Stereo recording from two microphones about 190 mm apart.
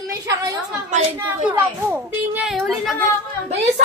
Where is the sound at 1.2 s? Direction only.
10° right (ahead or behind).